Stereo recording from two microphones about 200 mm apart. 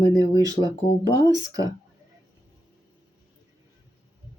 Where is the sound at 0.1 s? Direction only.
20° right (ahead or behind).